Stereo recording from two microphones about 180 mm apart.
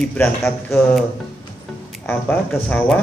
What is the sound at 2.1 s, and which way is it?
Speech, 10° left (ahead or behind).